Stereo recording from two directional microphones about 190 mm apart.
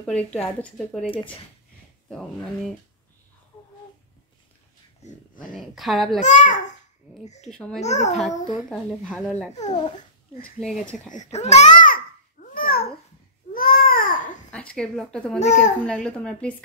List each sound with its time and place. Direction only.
0.0 s speech: 5° left (ahead or behind)
2.0 s speech: 5° left (ahead or behind)
5.0 s speech: 45° left (ahead or behind)
5.5 s speech: centre (ahead or behind)
6.2 s a child's voice: 40° left (ahead or behind)
7.4 s speech: 5° left (ahead or behind)
7.8 s a child's voice: 35° left (ahead or behind)
8.6 s speech: 5° left (ahead or behind)
9.6 s speech: 40° left (ahead or behind)
10.6 s speech: 5° left (ahead or behind)
11.1 s babbling: 35° left (ahead or behind)
14.5 s speech: 5° left (ahead or behind)
15.3 s a child's voice: 35° left (ahead or behind)
15.8 s speech: 5° left (ahead or behind)